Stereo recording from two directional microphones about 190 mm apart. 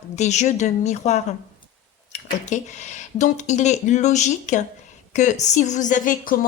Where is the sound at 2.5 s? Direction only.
40° left (ahead or behind).